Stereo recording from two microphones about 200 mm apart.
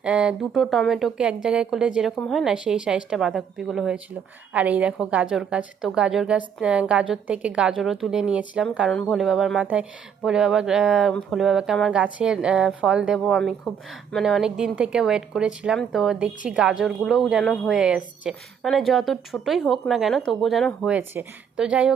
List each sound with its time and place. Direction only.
0.0 s speech: 5° right (ahead or behind)